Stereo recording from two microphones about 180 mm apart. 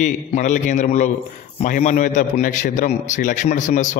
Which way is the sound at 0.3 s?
45° left (ahead or behind).